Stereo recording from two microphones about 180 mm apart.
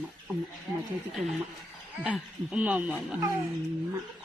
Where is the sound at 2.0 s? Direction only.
5° right (ahead or behind).